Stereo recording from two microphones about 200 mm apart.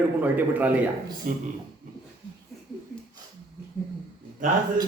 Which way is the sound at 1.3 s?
40° right (ahead or behind).